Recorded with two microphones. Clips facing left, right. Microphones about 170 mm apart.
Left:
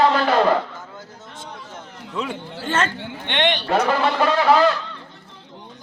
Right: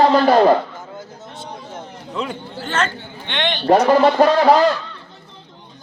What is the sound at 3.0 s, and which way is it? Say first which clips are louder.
Speech: left 3 dB; 80° left.